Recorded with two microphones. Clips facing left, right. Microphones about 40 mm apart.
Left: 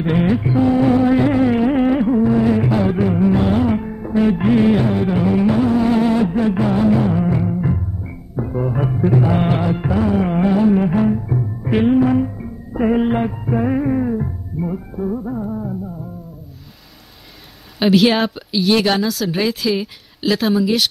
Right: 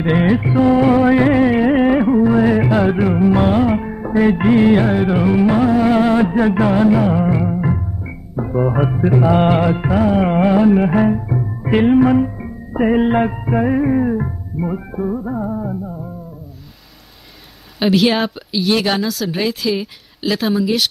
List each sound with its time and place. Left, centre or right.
0.0 s music: right
0.6 s music: right
3.5 s music: right
4.2 s music: right
5.1 s music: right
6.3 s music: right
7.0 s music: right
7.4 s music: right
8.5 s music: right
9.2 s music: right
11.1 s music: right
17.7 s speech: centre